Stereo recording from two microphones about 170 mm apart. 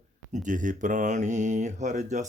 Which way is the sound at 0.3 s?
50° right (ahead or behind).